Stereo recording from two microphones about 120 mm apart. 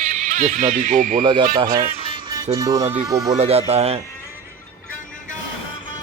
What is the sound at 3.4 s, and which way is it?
Speech, 60° right (ahead or behind).